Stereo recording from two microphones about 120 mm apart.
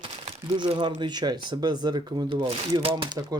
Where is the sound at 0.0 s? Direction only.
45° right (ahead or behind).